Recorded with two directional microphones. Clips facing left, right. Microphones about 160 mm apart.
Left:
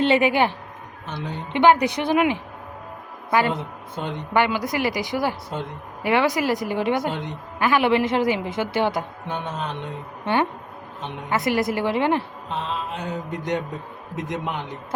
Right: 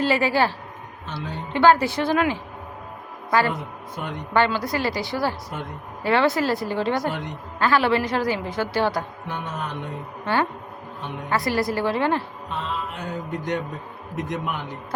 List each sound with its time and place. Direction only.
0.0 s a woman's voice: 20° left (ahead or behind)
11.0 s a woman's voice: 20° left (ahead or behind)
14.2 s a woman's voice: 20° left (ahead or behind)